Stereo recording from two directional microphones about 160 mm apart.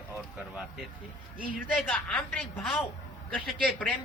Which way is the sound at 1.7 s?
10° left (ahead or behind).